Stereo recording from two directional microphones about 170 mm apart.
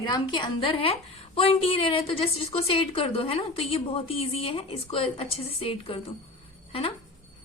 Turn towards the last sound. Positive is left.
turn(degrees=35)  # may be behind; listen again after turning